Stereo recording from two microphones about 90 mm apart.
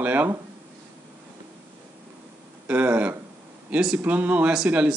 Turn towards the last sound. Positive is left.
turn(degrees=-10)  # may be behind; listen again after turning